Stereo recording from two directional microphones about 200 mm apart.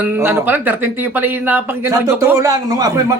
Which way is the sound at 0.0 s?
10° right (ahead or behind).